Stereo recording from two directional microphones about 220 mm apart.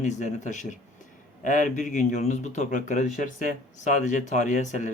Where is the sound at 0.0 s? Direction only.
35° left (ahead or behind).